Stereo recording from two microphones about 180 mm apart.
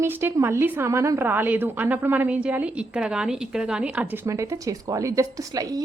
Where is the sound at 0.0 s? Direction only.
10° right (ahead or behind).